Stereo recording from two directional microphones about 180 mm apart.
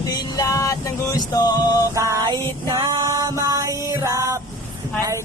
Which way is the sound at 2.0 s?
20° right (ahead or behind).